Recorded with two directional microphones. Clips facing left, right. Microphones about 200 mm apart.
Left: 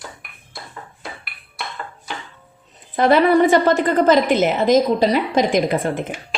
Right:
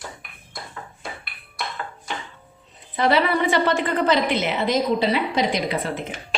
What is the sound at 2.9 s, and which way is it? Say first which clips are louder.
A woman's voice: left 6 dB; 50° left (ahead or behind).